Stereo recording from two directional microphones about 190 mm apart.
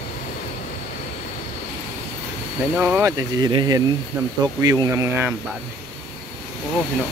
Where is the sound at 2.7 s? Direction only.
10° right (ahead or behind).